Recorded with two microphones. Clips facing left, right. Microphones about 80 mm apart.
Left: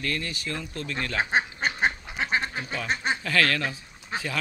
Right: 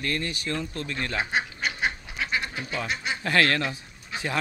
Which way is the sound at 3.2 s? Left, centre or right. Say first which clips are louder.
Right 4 dB; right.